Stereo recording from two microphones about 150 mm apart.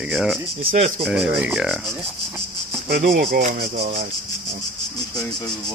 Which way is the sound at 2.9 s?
85° right.